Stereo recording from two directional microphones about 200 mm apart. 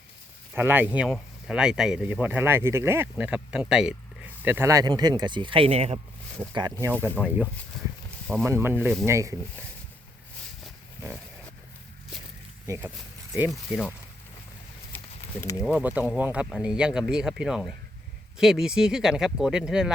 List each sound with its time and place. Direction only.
0.5 s speech: 10° right (ahead or behind); by 6.0 s 30° right (ahead or behind)
6.5 s speech: 20° right (ahead or behind)
7.2 s speech: 10° right (ahead or behind)
8.4 s speech: 10° right (ahead or behind)
12.6 s speech: 15° right (ahead or behind)
13.5 s speech: centre (ahead or behind)
14.9 s a sound: 10° left (ahead or behind)
15.6 s speech: 5° right (ahead or behind)